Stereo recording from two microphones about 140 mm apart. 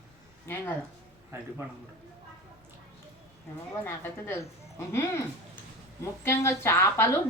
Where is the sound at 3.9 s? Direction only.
20° left (ahead or behind).